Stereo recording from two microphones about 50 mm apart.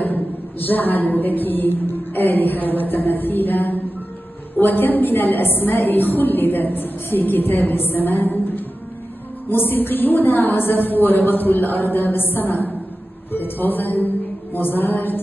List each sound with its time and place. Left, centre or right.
0.0 s a woman's voice: left